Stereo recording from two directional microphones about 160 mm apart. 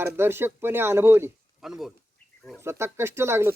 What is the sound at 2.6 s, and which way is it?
Speech, 15° right (ahead or behind).